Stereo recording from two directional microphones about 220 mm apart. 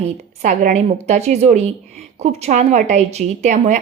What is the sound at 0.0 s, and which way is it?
A woman's voice, 35° right (ahead or behind).